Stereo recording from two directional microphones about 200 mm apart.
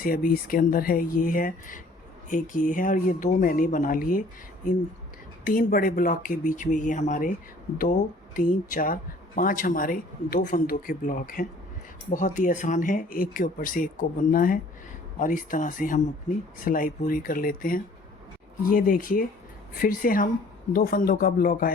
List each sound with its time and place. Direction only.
0.0 s speech: 45° left (ahead or behind)
5.5 s speech: 45° left (ahead or behind)